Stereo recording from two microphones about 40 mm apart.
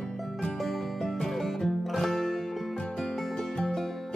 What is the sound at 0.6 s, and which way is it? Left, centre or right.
Music, centre.